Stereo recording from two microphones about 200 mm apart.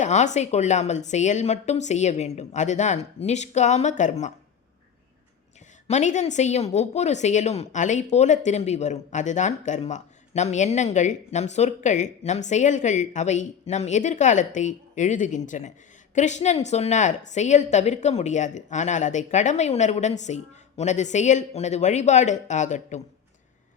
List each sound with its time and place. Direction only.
0.0 s a woman's voice: 35° left (ahead or behind)
5.9 s a woman's voice: 35° left (ahead or behind)